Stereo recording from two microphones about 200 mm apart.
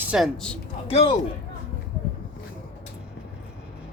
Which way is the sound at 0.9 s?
30° left (ahead or behind).